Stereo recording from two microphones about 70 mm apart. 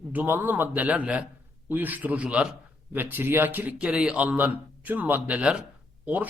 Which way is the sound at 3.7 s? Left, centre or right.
Centre.